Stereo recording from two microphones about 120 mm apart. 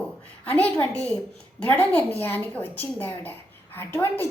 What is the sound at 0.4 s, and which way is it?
A woman's voice, 15° left (ahead or behind).